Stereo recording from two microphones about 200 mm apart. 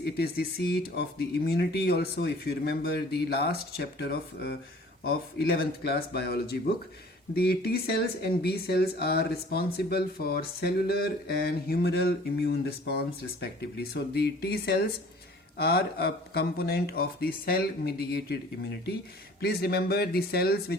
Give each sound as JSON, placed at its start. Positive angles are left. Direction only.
{"t": 0.0, "sound": "speech", "side_deg": 50}
{"t": 19.4, "sound": "speech", "side_deg": 50}